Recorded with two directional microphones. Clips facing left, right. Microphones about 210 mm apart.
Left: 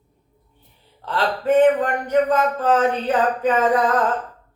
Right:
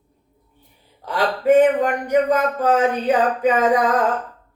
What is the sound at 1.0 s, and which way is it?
Speech, 10° right (ahead or behind).